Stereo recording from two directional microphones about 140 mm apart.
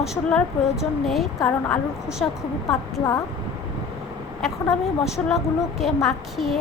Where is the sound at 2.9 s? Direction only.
25° left (ahead or behind).